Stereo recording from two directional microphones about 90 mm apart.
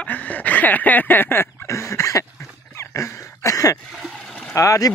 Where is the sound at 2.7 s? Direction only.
30° left (ahead or behind).